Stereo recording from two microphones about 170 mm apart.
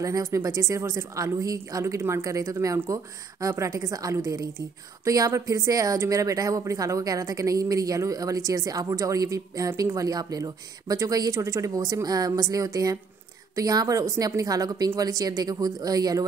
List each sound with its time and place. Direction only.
0.0 s a woman's voice: 20° right (ahead or behind)